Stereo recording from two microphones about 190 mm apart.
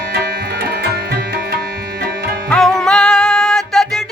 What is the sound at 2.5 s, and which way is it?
Music, centre (ahead or behind).